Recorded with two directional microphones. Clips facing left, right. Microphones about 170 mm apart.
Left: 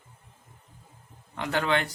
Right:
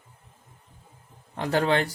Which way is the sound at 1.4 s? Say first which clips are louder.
Right 3 dB; 35° right (ahead or behind).